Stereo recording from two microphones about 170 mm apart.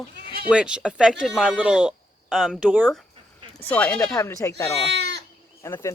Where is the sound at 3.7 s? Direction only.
10° left (ahead or behind).